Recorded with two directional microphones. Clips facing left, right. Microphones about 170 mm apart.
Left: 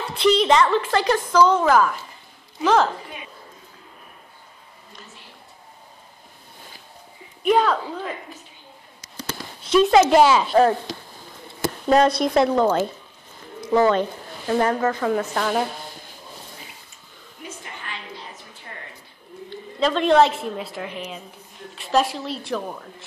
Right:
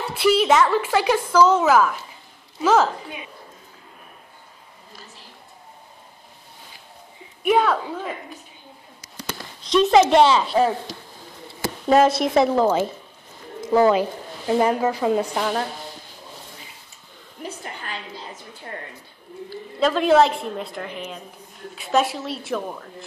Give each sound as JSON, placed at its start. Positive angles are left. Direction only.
{"t": 0.0, "sound": "a woman's voice", "side_deg": -10}
{"t": 7.4, "sound": "a woman's voice", "side_deg": -5}
{"t": 9.6, "sound": "a woman's voice", "side_deg": 5}
{"t": 11.9, "sound": "a woman's voice", "side_deg": 0}
{"t": 17.4, "sound": "a sound", "side_deg": -40}
{"t": 19.5, "sound": "a woman's voice", "side_deg": -5}